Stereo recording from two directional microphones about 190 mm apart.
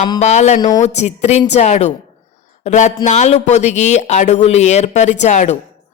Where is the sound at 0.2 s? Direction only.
35° left (ahead or behind).